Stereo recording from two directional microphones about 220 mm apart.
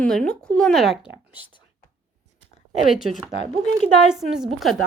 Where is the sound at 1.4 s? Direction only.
20° left (ahead or behind).